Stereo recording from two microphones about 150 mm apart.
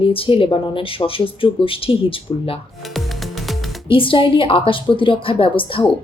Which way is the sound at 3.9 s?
35° left (ahead or behind).